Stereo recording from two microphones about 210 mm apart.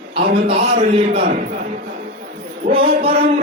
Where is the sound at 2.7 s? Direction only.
25° right (ahead or behind).